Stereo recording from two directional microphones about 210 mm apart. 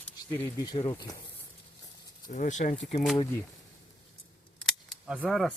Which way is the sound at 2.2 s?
40° left (ahead or behind).